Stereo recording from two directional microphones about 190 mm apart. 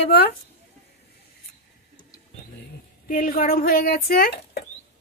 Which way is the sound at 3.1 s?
50° left (ahead or behind).